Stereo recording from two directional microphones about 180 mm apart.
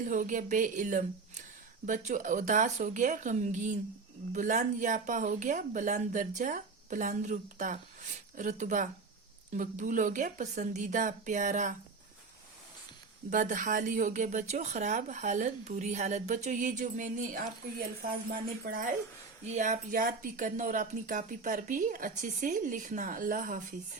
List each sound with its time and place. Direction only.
0.0 s speech: 45° right (ahead or behind)
13.3 s speech: 45° right (ahead or behind)